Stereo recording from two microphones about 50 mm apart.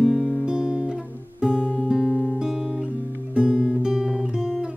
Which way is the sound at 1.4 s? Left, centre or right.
Centre.